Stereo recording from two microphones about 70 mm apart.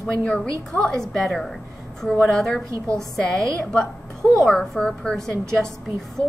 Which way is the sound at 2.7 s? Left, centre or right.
Right.